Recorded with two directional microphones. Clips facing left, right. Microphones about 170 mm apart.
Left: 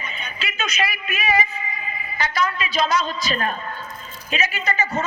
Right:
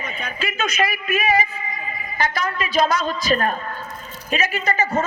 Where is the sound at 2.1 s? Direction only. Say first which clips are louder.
Even; 50° right (ahead or behind).